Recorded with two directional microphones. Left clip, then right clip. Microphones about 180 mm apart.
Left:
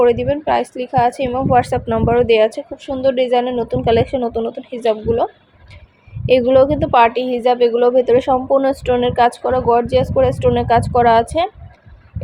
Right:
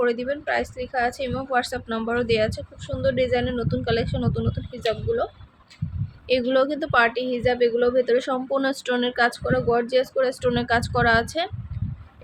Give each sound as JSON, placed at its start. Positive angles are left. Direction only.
{"t": 0.0, "sound": "speech", "side_deg": 15}
{"t": 6.2, "sound": "a woman's voice", "side_deg": 0}